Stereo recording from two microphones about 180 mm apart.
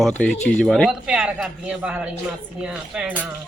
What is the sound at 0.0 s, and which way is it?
Speech, 5° left (ahead or behind).